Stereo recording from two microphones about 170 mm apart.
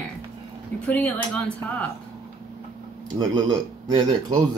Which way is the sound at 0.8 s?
10° left (ahead or behind).